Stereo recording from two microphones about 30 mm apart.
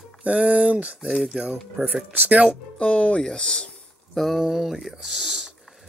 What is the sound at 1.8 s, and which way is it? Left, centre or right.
Speech, right.